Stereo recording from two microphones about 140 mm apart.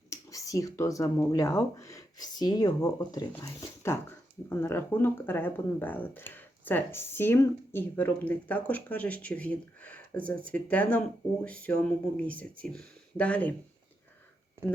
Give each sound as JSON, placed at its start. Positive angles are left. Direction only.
{"t": 0.1, "sound": "speech", "side_deg": 25}